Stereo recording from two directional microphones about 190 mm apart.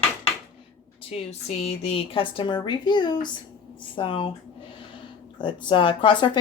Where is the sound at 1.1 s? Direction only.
35° left (ahead or behind).